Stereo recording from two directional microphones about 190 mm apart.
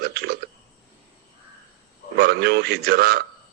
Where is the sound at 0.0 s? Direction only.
55° right (ahead or behind).